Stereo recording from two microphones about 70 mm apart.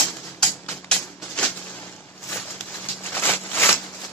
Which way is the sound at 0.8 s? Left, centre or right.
Centre.